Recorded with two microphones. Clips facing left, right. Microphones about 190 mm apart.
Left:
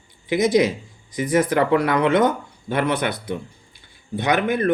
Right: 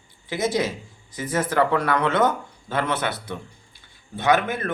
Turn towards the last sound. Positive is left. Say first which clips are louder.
# left 2 dB
turn(degrees=15)  # may be behind; listen again after turning